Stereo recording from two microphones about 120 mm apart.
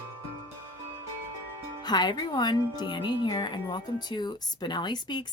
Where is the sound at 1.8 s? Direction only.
35° left (ahead or behind).